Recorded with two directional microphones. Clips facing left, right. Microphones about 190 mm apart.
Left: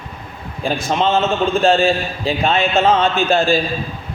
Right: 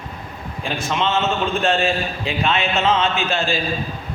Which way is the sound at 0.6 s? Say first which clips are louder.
Left 5 dB; 40° left (ahead or behind).